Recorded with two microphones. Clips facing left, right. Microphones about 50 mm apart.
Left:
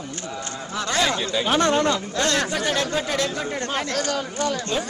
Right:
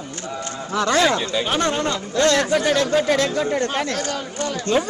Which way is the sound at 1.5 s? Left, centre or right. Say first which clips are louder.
Left 4 dB; left.